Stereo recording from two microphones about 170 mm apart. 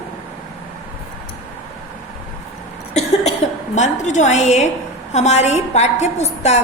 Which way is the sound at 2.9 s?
40° left (ahead or behind).